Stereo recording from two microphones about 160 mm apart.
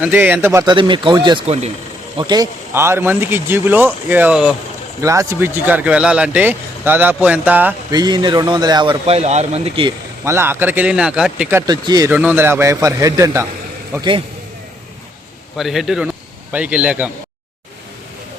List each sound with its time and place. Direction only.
0.0 s speech: 10° right (ahead or behind)
0.6 s speech: 30° right (ahead or behind)
2.7 s speech: 15° right (ahead or behind)
5.0 s speech: 20° right (ahead or behind)
7.9 s a man's voice: 25° right (ahead or behind)
10.2 s speech: 15° right (ahead or behind)
11.6 s speech: 25° right (ahead or behind)
12.0 s speech: 10° right (ahead or behind)
15.5 s speech: centre (ahead or behind)